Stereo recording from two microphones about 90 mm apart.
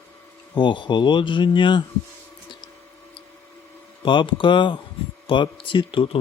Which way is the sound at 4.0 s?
65° left (ahead or behind).